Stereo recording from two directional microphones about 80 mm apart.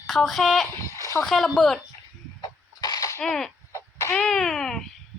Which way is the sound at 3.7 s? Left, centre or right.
Left.